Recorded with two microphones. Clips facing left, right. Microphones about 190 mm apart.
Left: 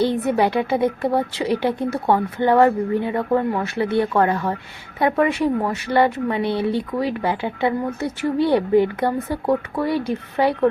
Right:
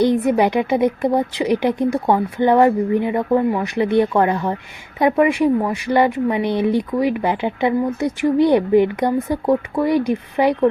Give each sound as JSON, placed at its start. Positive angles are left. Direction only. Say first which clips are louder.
{"t": 0.0, "sound": "speech", "louder": "right 3 dB", "side_deg": -15}